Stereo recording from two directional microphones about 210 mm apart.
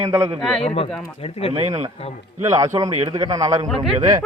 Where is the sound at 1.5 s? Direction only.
15° right (ahead or behind).